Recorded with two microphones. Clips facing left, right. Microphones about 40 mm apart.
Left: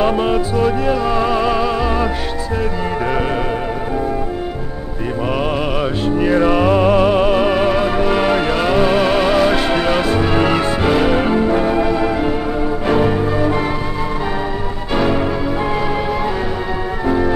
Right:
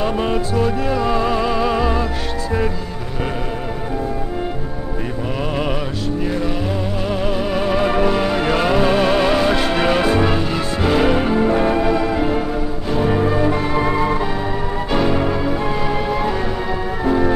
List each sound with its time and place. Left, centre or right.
0.2 s music: centre
6.2 s music: left
7.1 s music: left
7.8 s music: centre
8.1 s music: left
8.5 s music: centre
10.8 s music: centre
15.0 s music: centre
17.0 s music: centre